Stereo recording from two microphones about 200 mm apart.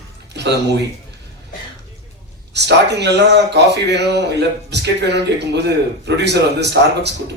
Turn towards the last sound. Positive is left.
turn(degrees=-60)  # may be behind; listen again after turning